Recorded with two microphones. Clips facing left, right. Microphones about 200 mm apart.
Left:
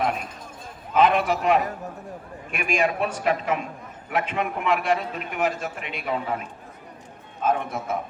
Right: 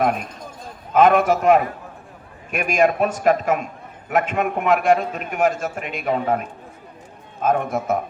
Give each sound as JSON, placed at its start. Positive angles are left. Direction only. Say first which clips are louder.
{"t": 0.9, "sound": "a man's voice", "louder": "right 5 dB", "side_deg": -45}